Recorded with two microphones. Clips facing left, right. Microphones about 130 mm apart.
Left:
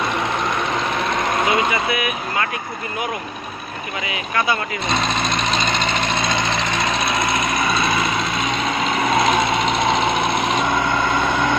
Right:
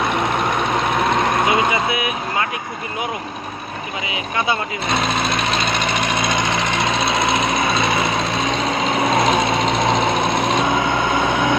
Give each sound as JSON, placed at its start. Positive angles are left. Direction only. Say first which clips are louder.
{"t": 1.5, "sound": "speech", "louder": "right 1 dB", "side_deg": -25}
{"t": 4.1, "sound": "speech", "louder": "even", "side_deg": -20}
{"t": 4.8, "sound": "engine", "louder": "right 1 dB", "side_deg": -5}
{"t": 9.1, "sound": "a sound", "louder": "left 1 dB", "side_deg": -35}